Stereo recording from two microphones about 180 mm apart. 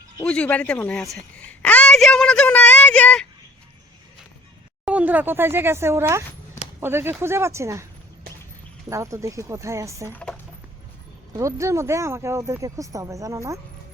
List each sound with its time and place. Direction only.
0.2 s a woman's voice: 5° left (ahead or behind)
4.9 s speech: 10° right (ahead or behind)
8.9 s speech: 15° right (ahead or behind)
10.1 s speech: 5° left (ahead or behind)
11.3 s speech: 15° right (ahead or behind)